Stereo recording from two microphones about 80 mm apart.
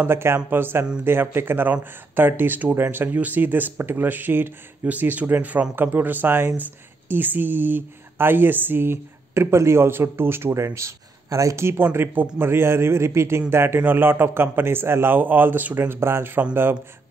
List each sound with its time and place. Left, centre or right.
0.0 s speech: right